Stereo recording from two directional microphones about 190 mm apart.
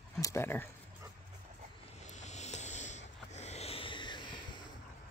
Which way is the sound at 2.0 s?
40° left (ahead or behind).